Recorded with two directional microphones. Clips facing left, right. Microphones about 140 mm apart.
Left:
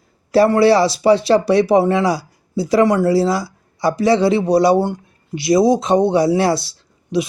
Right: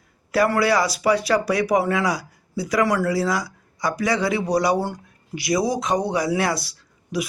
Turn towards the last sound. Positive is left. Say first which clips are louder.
# left 7 dB
turn(degrees=25)  # may be behind; listen again after turning